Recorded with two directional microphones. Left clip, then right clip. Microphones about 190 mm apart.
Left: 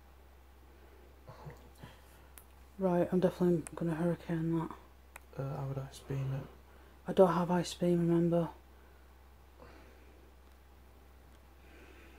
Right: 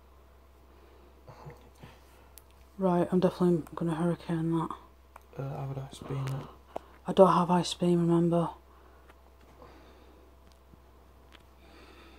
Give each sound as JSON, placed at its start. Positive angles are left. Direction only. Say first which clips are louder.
{"t": 2.8, "sound": "speech", "louder": "right 3 dB", "side_deg": -25}